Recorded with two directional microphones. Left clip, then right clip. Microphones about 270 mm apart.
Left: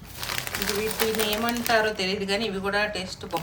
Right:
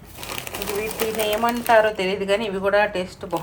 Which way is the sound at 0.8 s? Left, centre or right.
Centre.